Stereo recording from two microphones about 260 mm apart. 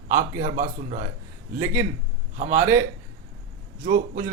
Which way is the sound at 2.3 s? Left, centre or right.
Right.